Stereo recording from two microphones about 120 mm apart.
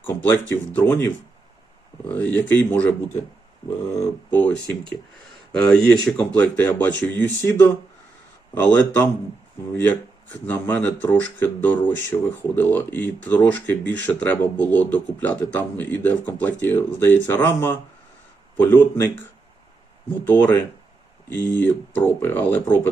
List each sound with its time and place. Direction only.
0.0 s speech: 15° left (ahead or behind)
4.3 s speech: 10° left (ahead or behind)
20.2 s speech: 15° left (ahead or behind)